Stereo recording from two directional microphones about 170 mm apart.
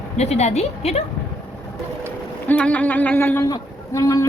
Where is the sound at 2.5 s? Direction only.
5° left (ahead or behind).